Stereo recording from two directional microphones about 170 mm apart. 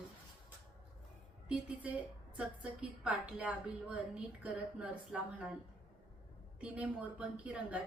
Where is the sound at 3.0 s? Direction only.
5° right (ahead or behind).